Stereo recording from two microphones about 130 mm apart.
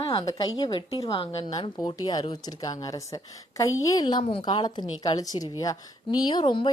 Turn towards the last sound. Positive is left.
turn(degrees=35)  # may be behind; listen again after turning